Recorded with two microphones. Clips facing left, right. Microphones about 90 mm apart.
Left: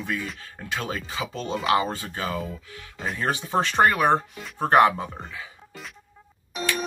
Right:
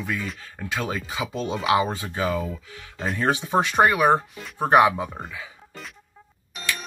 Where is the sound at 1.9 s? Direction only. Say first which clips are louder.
Right 4 dB; 20° right (ahead or behind).